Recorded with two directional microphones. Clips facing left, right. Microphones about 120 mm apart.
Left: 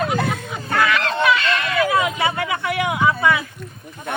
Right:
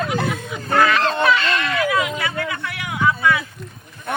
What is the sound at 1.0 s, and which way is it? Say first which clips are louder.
Honk: right 1 dB; 35° right (ahead or behind).